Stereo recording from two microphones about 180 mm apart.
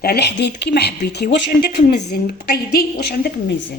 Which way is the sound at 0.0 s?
65° left (ahead or behind).